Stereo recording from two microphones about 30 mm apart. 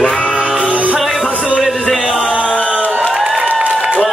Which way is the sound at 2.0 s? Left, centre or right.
Right.